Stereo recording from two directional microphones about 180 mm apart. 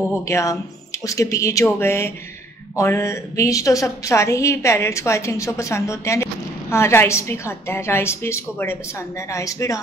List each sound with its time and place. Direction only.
0.2 s a woman's voice: 15° left (ahead or behind)